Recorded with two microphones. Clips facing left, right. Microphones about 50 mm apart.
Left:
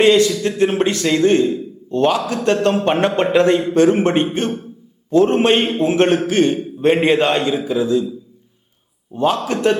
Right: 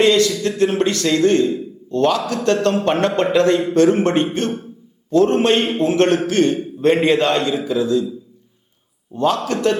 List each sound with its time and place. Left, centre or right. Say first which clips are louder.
0.0 s a man's voice: left 2 dB; centre
9.1 s a man's voice: left 1 dB; centre